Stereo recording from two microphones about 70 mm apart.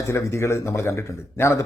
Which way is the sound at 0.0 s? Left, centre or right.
Left.